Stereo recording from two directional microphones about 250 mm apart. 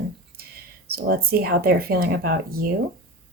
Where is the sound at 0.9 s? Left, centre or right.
Right.